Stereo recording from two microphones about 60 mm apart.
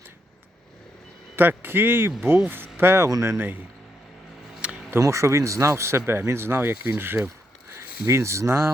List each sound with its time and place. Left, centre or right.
1.4 s speech: right
3.1 s speech: right
3.3 s speech: right
4.6 s a sound: centre
4.9 s speech: right